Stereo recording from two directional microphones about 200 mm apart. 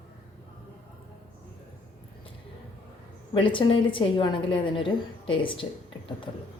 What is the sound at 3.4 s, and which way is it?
A woman's voice, 25° left (ahead or behind).